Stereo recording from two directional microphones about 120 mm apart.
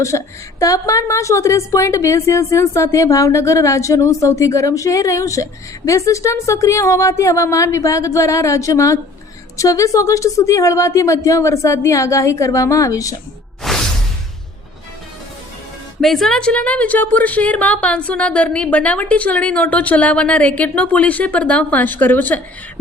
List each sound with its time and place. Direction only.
0.1 s a woman's voice: 30° left (ahead or behind)
13.6 s whoosh: 5° left (ahead or behind)
16.0 s a woman's voice: centre (ahead or behind)